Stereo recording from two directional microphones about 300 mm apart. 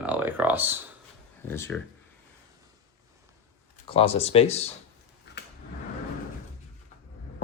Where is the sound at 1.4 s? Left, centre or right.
Centre.